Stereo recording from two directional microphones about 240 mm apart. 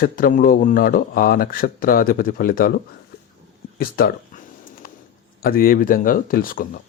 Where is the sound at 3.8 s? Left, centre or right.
Left.